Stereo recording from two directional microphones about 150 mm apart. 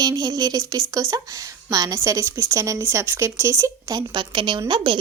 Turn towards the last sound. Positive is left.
turn(degrees=-30)  # may be behind; listen again after turning